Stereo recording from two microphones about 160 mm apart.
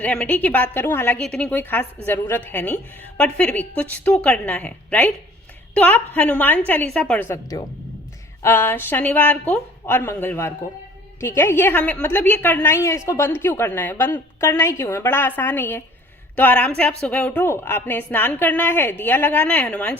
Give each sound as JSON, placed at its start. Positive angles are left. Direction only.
{"t": 0.0, "sound": "a woman's voice", "side_deg": 10}
{"t": 7.3, "sound": "a woman's voice", "side_deg": 20}